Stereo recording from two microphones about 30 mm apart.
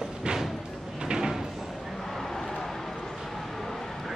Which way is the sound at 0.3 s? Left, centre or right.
Right.